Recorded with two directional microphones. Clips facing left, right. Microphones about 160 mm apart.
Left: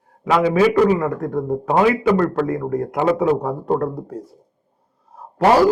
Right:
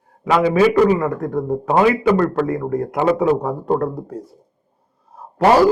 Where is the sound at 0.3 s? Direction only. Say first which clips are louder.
Right 1 dB; 15° right (ahead or behind).